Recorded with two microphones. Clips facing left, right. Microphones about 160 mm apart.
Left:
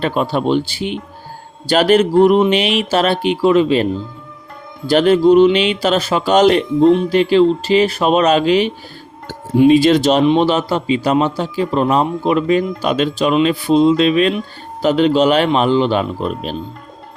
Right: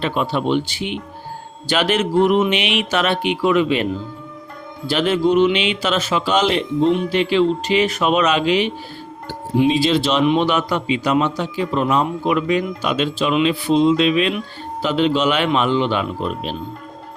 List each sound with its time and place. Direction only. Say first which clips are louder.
0.0 s a man's voice: left 3 dB; 40° left (ahead or behind)
4.9 s a man's voice: left 7 dB; 40° left (ahead or behind)
9.5 s speech: left 6 dB; 50° left (ahead or behind)
10.2 s a man's voice: left 4 dB; 30° left (ahead or behind)